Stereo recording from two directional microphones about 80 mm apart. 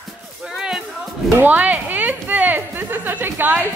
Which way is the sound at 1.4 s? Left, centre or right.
Right.